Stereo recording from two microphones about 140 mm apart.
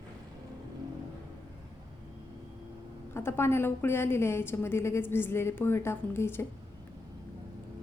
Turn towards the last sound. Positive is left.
turn(degrees=15)  # may be behind; listen again after turning